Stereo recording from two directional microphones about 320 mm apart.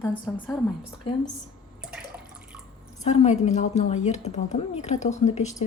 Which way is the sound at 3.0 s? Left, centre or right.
Left.